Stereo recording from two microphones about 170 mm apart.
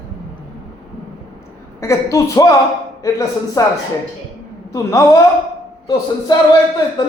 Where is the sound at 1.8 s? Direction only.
20° left (ahead or behind).